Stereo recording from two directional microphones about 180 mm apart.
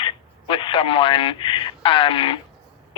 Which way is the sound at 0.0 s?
30° left (ahead or behind).